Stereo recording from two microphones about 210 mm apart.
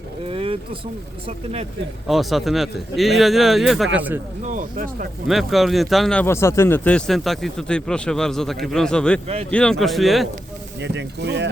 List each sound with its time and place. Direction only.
0.3 s speech: 25° right (ahead or behind)
2.0 s speech: centre (ahead or behind)
4.4 s speech: 40° right (ahead or behind)
5.3 s speech: centre (ahead or behind)
9.2 s speech: 30° right (ahead or behind)
9.5 s speech: 5° left (ahead or behind)
10.8 s speech: 55° right (ahead or behind)